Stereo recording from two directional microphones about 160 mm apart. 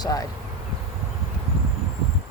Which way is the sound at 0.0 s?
25° left (ahead or behind).